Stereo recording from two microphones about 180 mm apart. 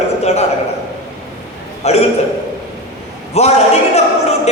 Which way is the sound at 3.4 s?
35° left (ahead or behind).